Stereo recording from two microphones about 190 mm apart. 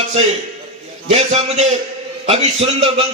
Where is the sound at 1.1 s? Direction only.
35° right (ahead or behind).